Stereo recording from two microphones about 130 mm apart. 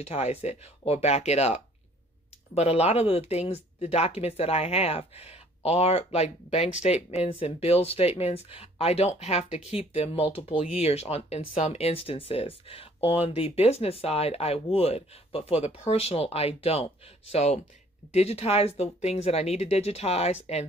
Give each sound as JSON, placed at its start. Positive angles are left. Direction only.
{"t": 0.0, "sound": "speech", "side_deg": 55}